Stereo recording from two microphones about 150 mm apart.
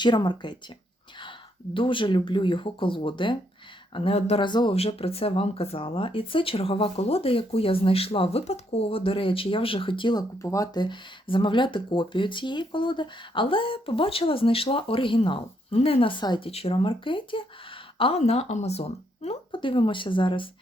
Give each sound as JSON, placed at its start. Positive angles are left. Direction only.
{"t": 0.0, "sound": "speech", "side_deg": 30}
{"t": 1.7, "sound": "speech", "side_deg": 35}
{"t": 17.9, "sound": "a sound", "side_deg": 40}
{"t": 18.2, "sound": "speech", "side_deg": 45}